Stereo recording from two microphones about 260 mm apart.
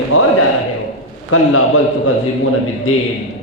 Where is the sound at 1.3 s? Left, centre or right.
Left.